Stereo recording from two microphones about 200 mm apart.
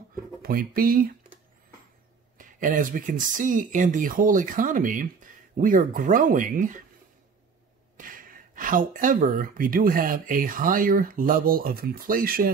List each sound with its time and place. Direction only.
0.4 s speech: 45° right (ahead or behind)
2.3 s speech: 40° right (ahead or behind)
8.0 s speech: 45° right (ahead or behind)